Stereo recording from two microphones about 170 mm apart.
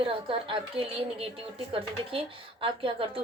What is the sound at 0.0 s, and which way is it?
Speech, 30° right (ahead or behind).